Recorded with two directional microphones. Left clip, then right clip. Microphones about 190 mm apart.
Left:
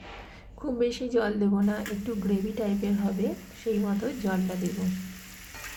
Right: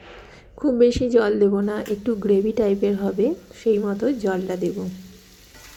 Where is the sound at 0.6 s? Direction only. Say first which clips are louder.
Right 11 dB; 25° right (ahead or behind).